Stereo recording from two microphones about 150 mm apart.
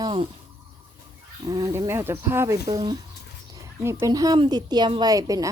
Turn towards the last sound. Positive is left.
turn(degrees=-25)  # may be behind; listen again after turning